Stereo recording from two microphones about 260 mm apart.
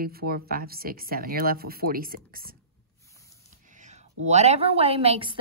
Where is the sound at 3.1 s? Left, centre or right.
Centre.